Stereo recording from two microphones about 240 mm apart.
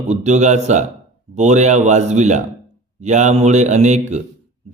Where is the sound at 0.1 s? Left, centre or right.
Right.